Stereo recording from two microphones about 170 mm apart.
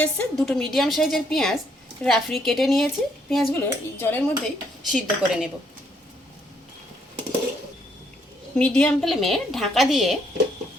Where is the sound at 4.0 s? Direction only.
10° left (ahead or behind).